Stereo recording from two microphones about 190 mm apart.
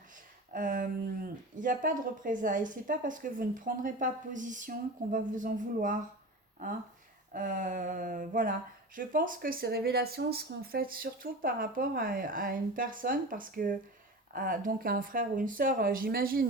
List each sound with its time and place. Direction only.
0.5 s speech: 45° right (ahead or behind)
7.3 s speech: 45° right (ahead or behind)